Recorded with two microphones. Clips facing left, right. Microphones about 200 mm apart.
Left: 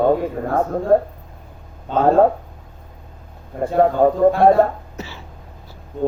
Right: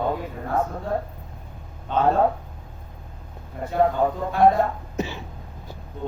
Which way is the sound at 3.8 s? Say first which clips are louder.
Left 8 dB; 45° left (ahead or behind).